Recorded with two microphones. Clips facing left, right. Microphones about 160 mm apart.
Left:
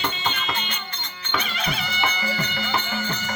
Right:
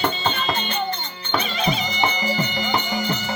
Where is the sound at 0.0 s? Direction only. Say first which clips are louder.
Right 5 dB; 40° right (ahead or behind).